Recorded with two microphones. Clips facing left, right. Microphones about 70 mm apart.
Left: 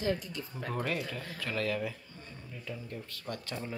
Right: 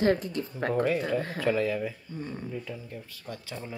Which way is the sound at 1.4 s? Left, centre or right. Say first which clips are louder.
Right 4 dB; centre.